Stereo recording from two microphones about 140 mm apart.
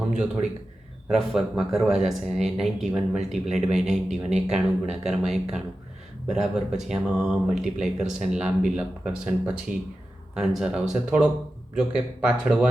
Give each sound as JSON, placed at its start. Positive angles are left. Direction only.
{"t": 1.0, "sound": "speech", "side_deg": -5}
{"t": 9.7, "sound": "speech", "side_deg": -75}
{"t": 10.3, "sound": "speech", "side_deg": -5}